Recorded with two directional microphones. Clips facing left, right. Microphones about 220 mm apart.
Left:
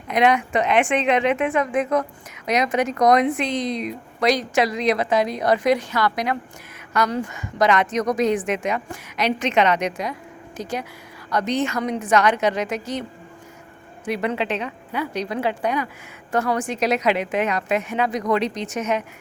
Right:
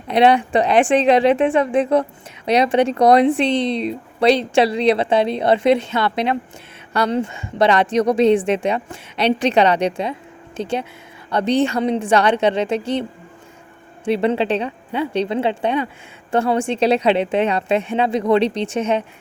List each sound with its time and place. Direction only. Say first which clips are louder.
0.1 s a woman's voice: right 4 dB; 30° right (ahead or behind)